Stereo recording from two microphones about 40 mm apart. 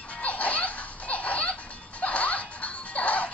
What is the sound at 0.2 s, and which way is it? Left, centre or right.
Music, left.